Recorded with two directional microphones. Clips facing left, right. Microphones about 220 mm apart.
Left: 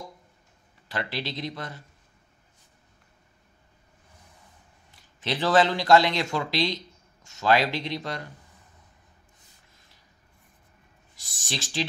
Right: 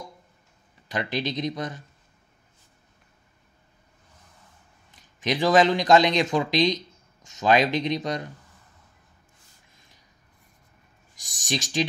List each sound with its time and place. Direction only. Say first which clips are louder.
0.8 s speech: right 4 dB; 15° right (ahead or behind)
4.9 s speech: right 4 dB; 15° right (ahead or behind)
11.1 s speech: right 6 dB; 15° right (ahead or behind)